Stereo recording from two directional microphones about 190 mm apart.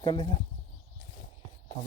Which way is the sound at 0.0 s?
25° left (ahead or behind).